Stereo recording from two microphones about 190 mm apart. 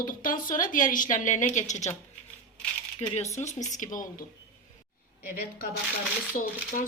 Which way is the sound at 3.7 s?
40° left (ahead or behind).